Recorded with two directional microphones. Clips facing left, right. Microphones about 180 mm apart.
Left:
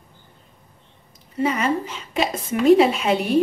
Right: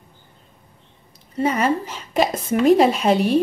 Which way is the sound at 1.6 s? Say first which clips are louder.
Right 2 dB; 45° right (ahead or behind).